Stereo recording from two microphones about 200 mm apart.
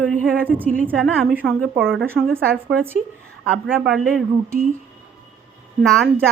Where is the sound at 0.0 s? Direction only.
5° left (ahead or behind).